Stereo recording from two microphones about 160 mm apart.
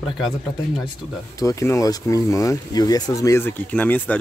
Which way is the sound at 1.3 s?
20° left (ahead or behind).